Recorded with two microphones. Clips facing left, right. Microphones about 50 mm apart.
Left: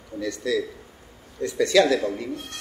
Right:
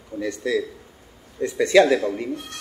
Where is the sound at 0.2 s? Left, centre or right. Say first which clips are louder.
Right 2 dB; right.